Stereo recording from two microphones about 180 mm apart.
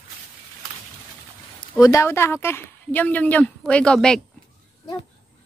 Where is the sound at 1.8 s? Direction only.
15° left (ahead or behind).